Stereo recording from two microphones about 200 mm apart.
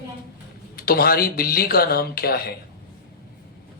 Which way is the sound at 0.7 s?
50° left (ahead or behind).